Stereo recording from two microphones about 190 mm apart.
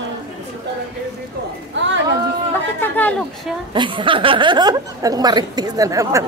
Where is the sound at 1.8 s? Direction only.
70° right (ahead or behind).